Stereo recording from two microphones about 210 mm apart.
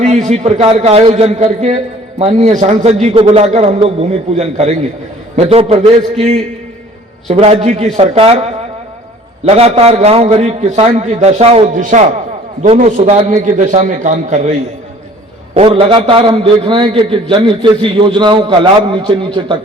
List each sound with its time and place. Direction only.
0.0 s a man's voice: 35° right (ahead or behind)
9.5 s a man's voice: 30° right (ahead or behind)
15.5 s a man's voice: 30° right (ahead or behind)